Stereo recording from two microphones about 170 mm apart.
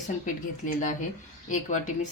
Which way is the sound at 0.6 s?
50° left (ahead or behind).